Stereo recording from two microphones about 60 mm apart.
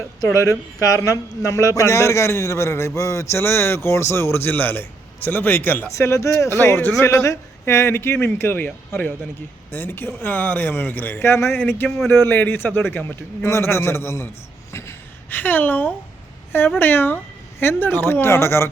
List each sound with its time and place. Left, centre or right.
0.8 s a man's voice: left
5.9 s a man's voice: left
6.6 s speech: left
7.0 s a man's voice: left
14.7 s gasp: left
15.3 s speech: left